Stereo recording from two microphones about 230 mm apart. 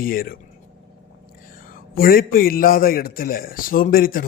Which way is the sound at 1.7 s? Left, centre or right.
Left.